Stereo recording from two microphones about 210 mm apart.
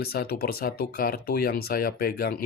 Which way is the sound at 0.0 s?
50° left (ahead or behind).